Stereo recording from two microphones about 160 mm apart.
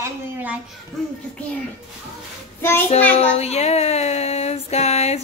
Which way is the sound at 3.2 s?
40° left (ahead or behind).